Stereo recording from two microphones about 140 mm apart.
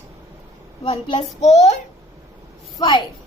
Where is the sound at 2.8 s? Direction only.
35° left (ahead or behind).